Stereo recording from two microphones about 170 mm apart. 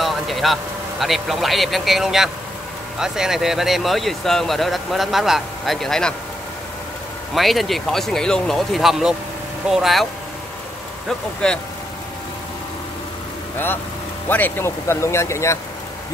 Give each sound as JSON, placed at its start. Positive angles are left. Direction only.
{"t": 0.0, "sound": "a man's voice", "side_deg": 0}
{"t": 7.3, "sound": "speech", "side_deg": 0}
{"t": 11.1, "sound": "speech", "side_deg": 5}
{"t": 14.3, "sound": "speech", "side_deg": 15}